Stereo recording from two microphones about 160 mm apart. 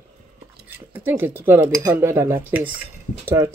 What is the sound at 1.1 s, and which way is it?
Speech, 15° right (ahead or behind).